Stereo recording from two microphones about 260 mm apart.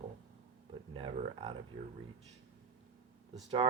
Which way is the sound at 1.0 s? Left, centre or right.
Right.